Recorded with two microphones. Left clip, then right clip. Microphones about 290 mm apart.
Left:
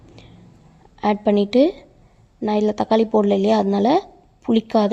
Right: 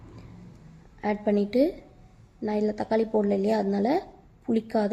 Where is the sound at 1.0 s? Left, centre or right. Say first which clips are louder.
Left 8 dB; left.